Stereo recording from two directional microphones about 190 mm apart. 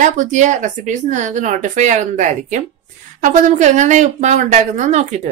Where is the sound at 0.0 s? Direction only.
40° right (ahead or behind).